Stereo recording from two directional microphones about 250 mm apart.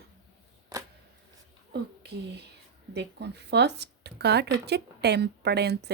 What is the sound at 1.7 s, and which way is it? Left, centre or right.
Speech, right.